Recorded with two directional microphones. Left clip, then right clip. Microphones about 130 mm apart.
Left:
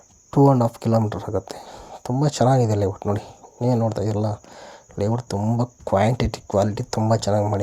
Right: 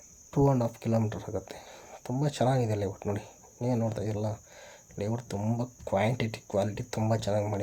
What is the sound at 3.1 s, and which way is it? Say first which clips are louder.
Cricket: left 9 dB; 50° left (ahead or behind).